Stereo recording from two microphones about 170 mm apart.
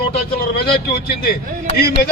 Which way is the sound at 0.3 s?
65° left (ahead or behind).